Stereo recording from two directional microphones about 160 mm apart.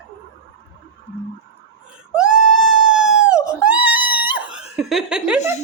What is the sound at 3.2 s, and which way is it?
Screaming, 5° right (ahead or behind).